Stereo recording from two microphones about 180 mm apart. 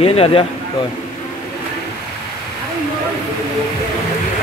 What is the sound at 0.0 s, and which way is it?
Speech, 30° left (ahead or behind).